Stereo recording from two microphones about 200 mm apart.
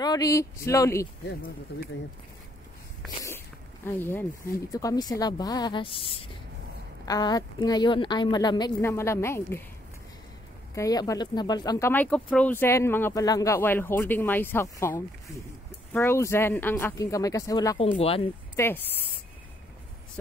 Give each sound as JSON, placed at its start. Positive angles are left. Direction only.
{"t": 0.0, "sound": "speech", "side_deg": 20}
{"t": 3.3, "sound": "a sound", "side_deg": 10}
{"t": 4.7, "sound": "a woman's voice", "side_deg": 20}
{"t": 10.7, "sound": "speech", "side_deg": 15}
{"t": 18.6, "sound": "speech", "side_deg": 10}